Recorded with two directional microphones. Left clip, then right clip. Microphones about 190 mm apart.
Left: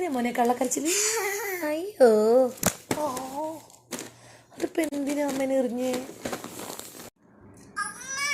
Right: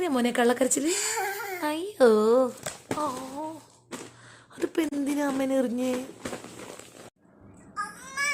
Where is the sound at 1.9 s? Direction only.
10° right (ahead or behind).